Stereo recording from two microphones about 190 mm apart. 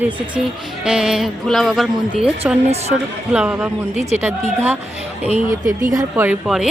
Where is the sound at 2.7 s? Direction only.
35° right (ahead or behind).